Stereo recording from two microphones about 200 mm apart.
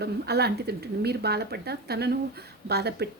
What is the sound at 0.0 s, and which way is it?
Speech, 55° right (ahead or behind).